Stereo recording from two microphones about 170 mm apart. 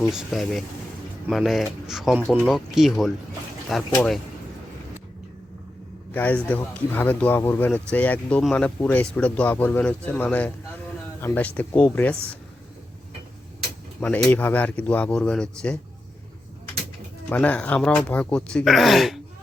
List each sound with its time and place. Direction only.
0.1 s speech: centre (ahead or behind)
6.1 s speech: 10° left (ahead or behind)
14.0 s speech: 10° left (ahead or behind)
17.2 s speech: 10° left (ahead or behind)